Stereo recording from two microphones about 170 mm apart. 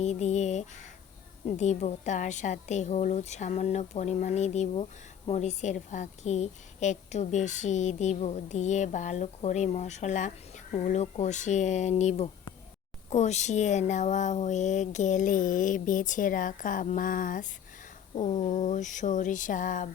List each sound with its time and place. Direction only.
0.0 s a woman's voice: 40° left (ahead or behind)